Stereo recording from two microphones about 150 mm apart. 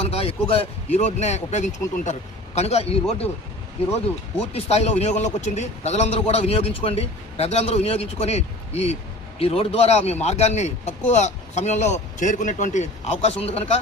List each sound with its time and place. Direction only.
0.1 s a man's voice: 40° left (ahead or behind)
4.5 s a man's voice: 45° left (ahead or behind)